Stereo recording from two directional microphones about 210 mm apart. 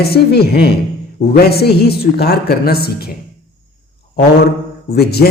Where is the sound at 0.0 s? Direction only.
50° left (ahead or behind).